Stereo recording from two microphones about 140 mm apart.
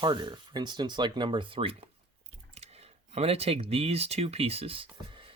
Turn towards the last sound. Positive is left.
turn(degrees=-40)  # may be behind; listen again after turning